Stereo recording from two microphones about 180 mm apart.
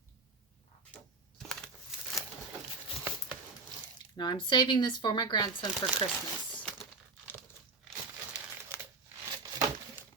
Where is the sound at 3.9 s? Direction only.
25° left (ahead or behind).